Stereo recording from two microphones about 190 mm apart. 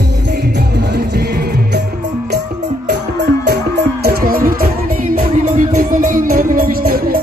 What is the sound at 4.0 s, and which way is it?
Music, 55° right (ahead or behind).